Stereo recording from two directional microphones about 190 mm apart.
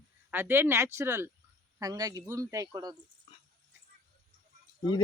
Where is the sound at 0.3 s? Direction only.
10° right (ahead or behind).